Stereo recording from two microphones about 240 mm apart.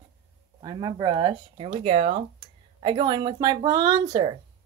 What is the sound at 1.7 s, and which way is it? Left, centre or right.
Speech, right.